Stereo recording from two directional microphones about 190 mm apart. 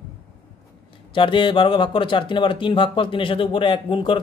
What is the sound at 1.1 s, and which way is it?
Speech, 25° left (ahead or behind).